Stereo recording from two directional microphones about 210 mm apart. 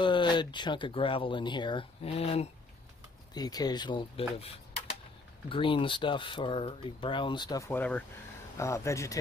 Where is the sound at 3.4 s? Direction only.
20° left (ahead or behind).